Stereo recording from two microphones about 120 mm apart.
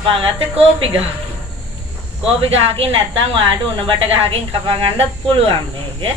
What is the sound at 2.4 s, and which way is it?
Speech, 50° right (ahead or behind).